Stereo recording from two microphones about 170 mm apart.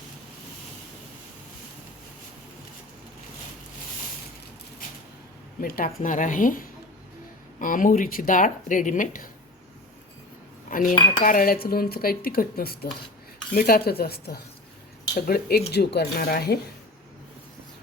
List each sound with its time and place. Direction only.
5.5 s speech: 55° left (ahead or behind)
10.7 s cutlery: 50° left (ahead or behind)
11.2 s speech: 55° left (ahead or behind)